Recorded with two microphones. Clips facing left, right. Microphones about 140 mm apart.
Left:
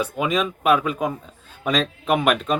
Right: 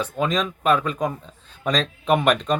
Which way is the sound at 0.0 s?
10° left (ahead or behind).